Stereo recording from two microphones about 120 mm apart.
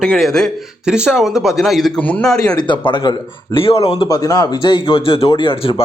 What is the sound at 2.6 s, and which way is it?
Speech, 40° left (ahead or behind).